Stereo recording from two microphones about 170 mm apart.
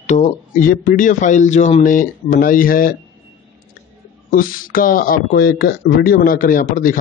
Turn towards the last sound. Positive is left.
turn(degrees=50)  # may be behind; listen again after turning